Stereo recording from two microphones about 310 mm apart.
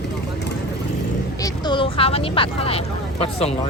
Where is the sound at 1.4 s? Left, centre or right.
Centre.